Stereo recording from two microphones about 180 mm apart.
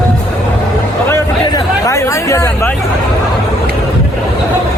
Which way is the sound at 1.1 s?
15° left (ahead or behind).